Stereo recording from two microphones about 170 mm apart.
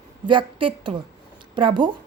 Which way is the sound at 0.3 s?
30° right (ahead or behind).